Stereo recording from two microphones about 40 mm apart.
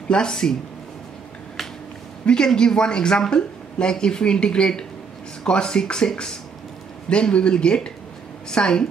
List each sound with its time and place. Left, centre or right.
0.1 s speech: centre
2.2 s speech: centre